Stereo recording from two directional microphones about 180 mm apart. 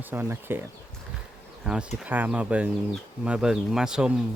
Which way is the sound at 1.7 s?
5° right (ahead or behind).